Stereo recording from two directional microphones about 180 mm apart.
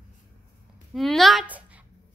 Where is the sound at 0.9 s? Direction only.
Centre (ahead or behind).